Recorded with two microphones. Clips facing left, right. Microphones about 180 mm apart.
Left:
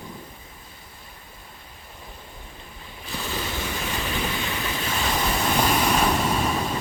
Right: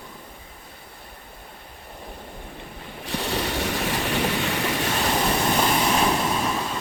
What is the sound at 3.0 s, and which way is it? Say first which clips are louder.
Vehicle: right 4 dB; 75° right (ahead or behind).